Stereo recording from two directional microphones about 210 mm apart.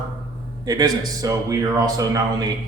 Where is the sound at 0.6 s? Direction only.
20° right (ahead or behind).